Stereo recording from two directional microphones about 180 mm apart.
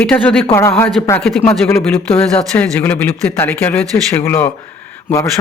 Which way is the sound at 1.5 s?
15° left (ahead or behind).